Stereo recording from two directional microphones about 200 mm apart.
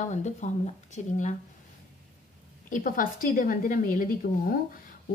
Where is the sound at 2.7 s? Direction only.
40° left (ahead or behind).